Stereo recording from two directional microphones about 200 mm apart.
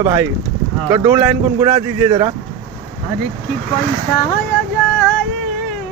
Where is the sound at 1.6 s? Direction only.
20° right (ahead or behind).